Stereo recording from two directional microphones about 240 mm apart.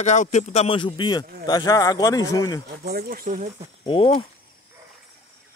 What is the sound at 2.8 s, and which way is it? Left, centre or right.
Speech, right.